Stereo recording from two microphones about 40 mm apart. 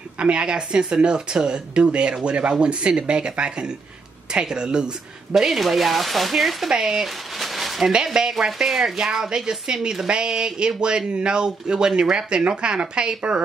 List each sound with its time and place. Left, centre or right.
0.2 s speech: right
5.3 s speech: centre
7.9 s speech: centre